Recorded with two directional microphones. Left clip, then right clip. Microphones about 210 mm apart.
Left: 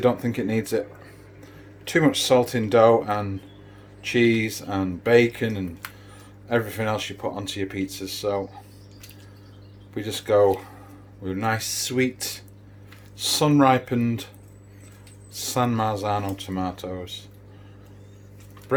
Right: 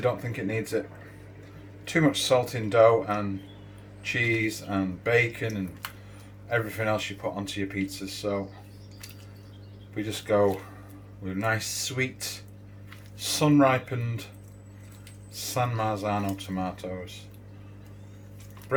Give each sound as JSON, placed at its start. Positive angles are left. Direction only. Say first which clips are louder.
{"t": 0.0, "sound": "speech", "louder": "left 6 dB", "side_deg": 40}
{"t": 1.8, "sound": "speech", "louder": "left 4 dB", "side_deg": 40}
{"t": 6.5, "sound": "speech", "louder": "left 3 dB", "side_deg": 40}
{"t": 9.9, "sound": "speech", "louder": "left 5 dB", "side_deg": 40}
{"t": 15.3, "sound": "speech", "louder": "left 5 dB", "side_deg": 40}